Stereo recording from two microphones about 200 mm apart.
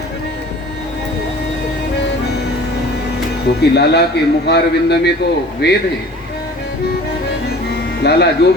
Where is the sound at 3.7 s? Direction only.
55° left (ahead or behind).